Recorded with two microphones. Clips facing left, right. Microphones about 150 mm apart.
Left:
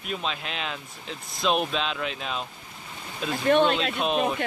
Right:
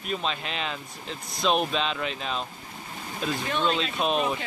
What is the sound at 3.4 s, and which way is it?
Speech, 60° left (ahead or behind).